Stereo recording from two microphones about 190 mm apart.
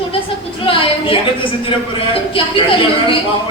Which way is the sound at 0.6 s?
25° left (ahead or behind).